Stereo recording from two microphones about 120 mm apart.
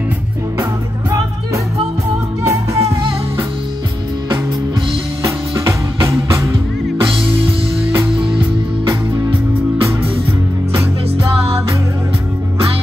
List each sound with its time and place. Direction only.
2.4 s music: 25° right (ahead or behind)
5.2 s music: 25° right (ahead or behind)